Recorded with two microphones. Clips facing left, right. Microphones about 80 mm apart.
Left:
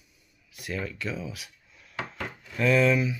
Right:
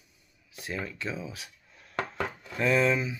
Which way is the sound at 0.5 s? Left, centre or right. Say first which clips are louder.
Left 2 dB; right.